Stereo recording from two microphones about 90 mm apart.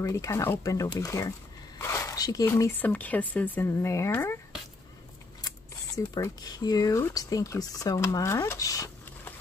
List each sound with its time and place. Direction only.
0.0 s speech: 35° left (ahead or behind)
1.8 s a sound: 30° left (ahead or behind)
2.2 s speech: 45° left (ahead or behind)
2.7 s speech: 20° left (ahead or behind)
3.7 s speech: 35° left (ahead or behind)
6.1 s speech: 45° left (ahead or behind)